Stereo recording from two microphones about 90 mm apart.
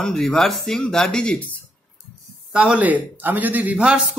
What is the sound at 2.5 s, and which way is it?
A man's voice, 15° right (ahead or behind).